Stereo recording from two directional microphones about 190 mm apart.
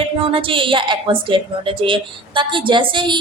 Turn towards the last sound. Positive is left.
turn(degrees=-25)  # may be behind; listen again after turning